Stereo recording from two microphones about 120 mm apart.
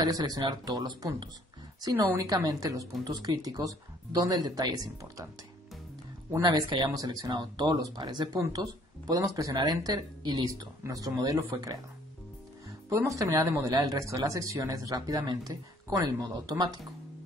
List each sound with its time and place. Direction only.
0.0 s speech: 35° right (ahead or behind)
6.4 s speech: 35° right (ahead or behind)
13.2 s speech: 30° right (ahead or behind)